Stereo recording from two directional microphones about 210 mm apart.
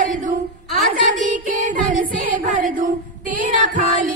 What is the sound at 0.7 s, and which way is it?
Child singing, 40° right (ahead or behind).